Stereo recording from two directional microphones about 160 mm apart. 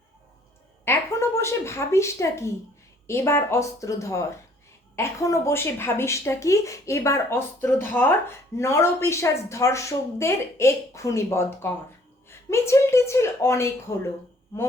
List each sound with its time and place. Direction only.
0.9 s a woman's voice: 15° left (ahead or behind)